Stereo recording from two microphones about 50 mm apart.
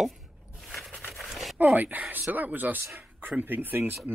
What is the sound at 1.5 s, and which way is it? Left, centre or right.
Speech, right.